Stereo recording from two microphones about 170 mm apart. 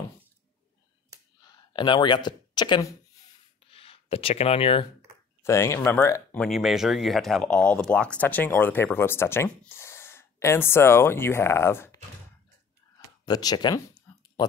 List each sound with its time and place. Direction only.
1.5 s speech: 25° left (ahead or behind)
3.7 s speech: 35° left (ahead or behind)
5.4 s speech: 15° left (ahead or behind)
6.4 s speech: centre (ahead or behind); by 12.0 s 15° left (ahead or behind)
13.2 s a sound: 25° left (ahead or behind)